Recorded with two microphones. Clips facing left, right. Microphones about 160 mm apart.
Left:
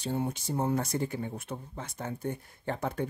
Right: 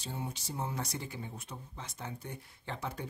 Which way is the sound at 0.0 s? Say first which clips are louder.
Left 9 dB; 55° left (ahead or behind).